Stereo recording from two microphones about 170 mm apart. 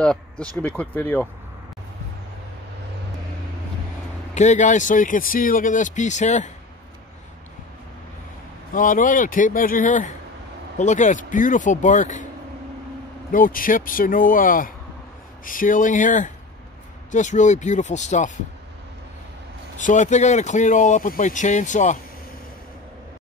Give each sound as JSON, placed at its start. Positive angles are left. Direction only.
{"t": 0.0, "sound": "speech", "side_deg": 5}
{"t": 4.4, "sound": "speech", "side_deg": 45}
{"t": 8.7, "sound": "speech", "side_deg": 50}
{"t": 13.3, "sound": "speech", "side_deg": 55}
{"t": 19.8, "sound": "speech", "side_deg": 45}